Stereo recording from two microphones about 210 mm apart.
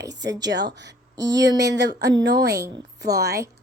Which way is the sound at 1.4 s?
55° right (ahead or behind).